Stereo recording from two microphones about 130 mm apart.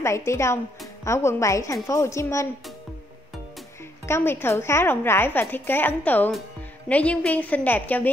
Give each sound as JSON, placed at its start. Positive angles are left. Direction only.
{"t": 0.0, "sound": "a woman's voice", "side_deg": 20}
{"t": 4.0, "sound": "a woman's voice", "side_deg": 20}